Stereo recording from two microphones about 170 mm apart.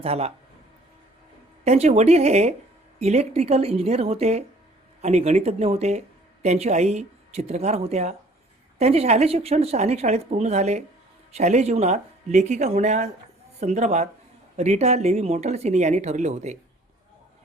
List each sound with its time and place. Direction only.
0.0 s speech: 35° right (ahead or behind)
1.6 s speech: 40° right (ahead or behind)